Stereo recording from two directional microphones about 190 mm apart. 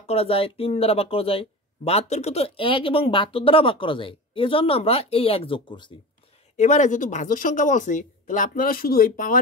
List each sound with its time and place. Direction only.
0.0 s speech: 30° left (ahead or behind)
6.5 s speech: 40° left (ahead or behind)